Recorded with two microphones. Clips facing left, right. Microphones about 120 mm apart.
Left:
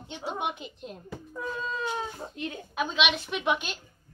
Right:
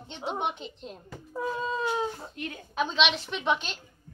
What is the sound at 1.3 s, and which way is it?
Speech, 25° right (ahead or behind).